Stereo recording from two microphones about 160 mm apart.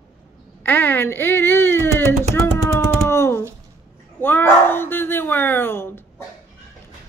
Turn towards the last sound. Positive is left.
turn(degrees=15)  # may be behind; listen again after turning